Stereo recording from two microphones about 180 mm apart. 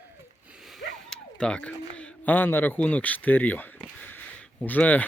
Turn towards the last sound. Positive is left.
turn(degrees=10)  # may be behind; listen again after turning